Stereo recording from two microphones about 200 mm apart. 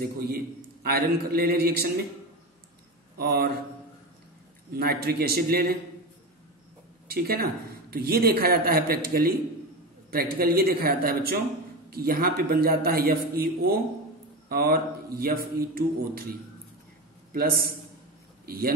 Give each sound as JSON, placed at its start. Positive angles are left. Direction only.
{"t": 0.0, "sound": "a man's voice", "side_deg": -50}
{"t": 3.2, "sound": "speech", "side_deg": -50}
{"t": 4.7, "sound": "a man's voice", "side_deg": -50}
{"t": 7.1, "sound": "a man's voice", "side_deg": -50}
{"t": 18.4, "sound": "a sound", "side_deg": -50}